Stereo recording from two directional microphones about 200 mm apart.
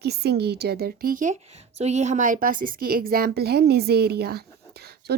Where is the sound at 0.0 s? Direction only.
55° right (ahead or behind).